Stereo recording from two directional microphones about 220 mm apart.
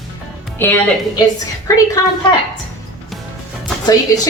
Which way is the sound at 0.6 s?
10° left (ahead or behind).